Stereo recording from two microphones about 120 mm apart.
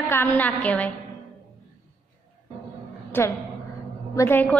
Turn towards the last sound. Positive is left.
turn(degrees=15)  # may be behind; listen again after turning